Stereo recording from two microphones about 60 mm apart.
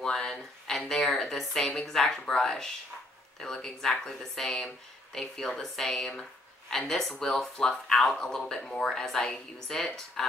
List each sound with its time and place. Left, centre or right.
0.0 s speech: centre